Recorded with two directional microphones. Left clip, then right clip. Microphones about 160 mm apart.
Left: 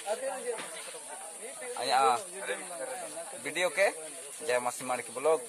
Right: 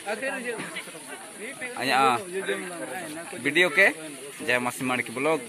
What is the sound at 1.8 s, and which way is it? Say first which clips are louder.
Speech: right 4 dB; centre (ahead or behind).